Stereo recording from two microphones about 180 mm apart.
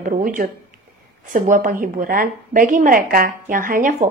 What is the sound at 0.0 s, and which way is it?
A woman's voice, 50° right (ahead or behind).